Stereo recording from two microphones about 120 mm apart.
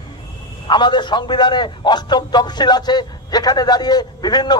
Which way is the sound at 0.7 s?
40° left (ahead or behind).